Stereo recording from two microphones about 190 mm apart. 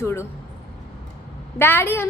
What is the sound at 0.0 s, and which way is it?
Speech, 15° left (ahead or behind).